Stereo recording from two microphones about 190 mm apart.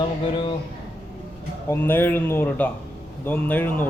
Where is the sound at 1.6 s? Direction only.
10° left (ahead or behind).